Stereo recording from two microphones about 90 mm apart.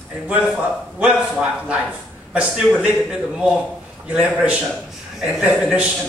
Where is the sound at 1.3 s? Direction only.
10° right (ahead or behind).